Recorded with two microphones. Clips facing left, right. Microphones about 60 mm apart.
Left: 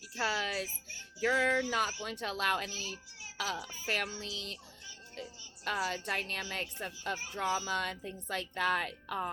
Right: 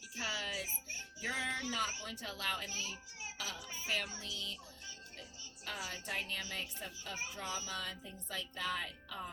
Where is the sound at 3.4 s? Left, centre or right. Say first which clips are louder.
Left 9 dB; left.